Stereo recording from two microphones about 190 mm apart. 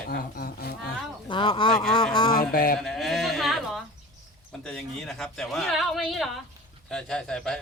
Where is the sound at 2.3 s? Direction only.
50° left (ahead or behind).